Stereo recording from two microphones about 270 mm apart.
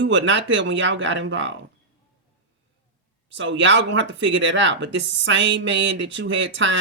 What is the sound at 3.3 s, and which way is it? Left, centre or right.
Speech, right.